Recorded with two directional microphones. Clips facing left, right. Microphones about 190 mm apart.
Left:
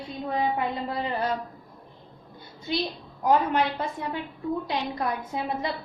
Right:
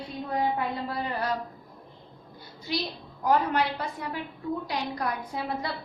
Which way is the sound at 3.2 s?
20° left (ahead or behind).